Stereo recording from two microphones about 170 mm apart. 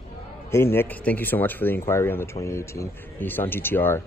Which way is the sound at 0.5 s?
15° left (ahead or behind).